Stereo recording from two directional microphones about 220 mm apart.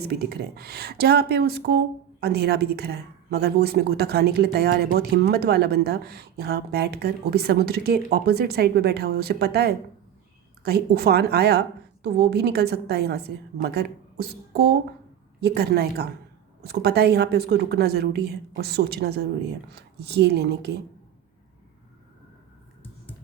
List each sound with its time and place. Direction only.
0.0 s speech: 45° right (ahead or behind)